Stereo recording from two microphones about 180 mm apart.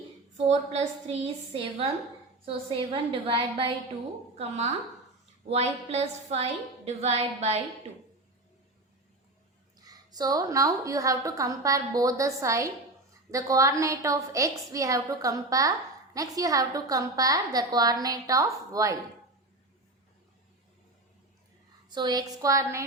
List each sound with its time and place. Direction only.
0.3 s a woman's voice: 40° right (ahead or behind)
9.8 s a woman's voice: 20° right (ahead or behind)
21.8 s a woman's voice: 25° right (ahead or behind)